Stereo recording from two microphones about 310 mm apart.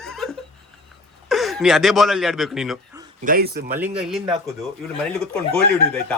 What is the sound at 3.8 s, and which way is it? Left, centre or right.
Speech, centre.